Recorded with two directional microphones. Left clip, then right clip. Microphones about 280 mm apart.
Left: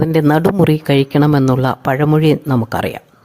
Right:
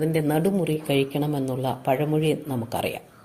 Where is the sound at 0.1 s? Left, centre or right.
Left.